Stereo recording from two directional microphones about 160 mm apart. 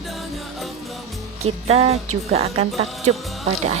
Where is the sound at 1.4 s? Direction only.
40° right (ahead or behind).